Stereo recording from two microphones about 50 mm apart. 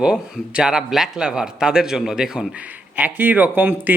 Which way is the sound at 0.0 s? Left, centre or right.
Centre.